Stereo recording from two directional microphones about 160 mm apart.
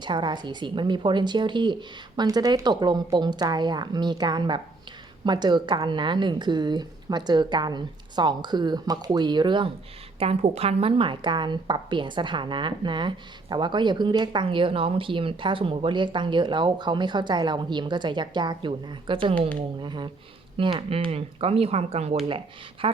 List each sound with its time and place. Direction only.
0.0 s a woman's voice: 30° right (ahead or behind)